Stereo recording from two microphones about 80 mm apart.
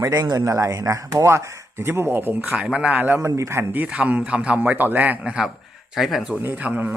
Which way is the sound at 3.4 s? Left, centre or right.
Right.